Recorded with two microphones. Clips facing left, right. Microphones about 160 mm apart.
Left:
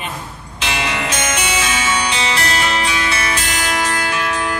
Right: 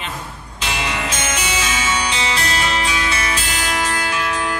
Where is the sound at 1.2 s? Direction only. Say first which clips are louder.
Left 3 dB; 70° left (ahead or behind).